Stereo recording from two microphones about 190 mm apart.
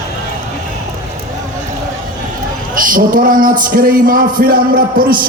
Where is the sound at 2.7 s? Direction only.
45° right (ahead or behind).